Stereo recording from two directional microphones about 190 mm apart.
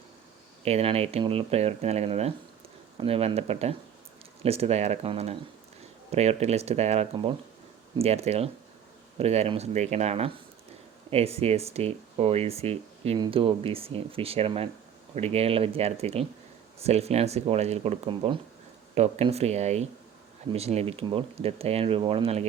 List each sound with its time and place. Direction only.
0.6 s speech: 30° right (ahead or behind)